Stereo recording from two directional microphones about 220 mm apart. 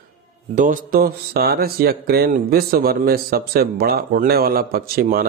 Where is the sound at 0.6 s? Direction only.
40° right (ahead or behind).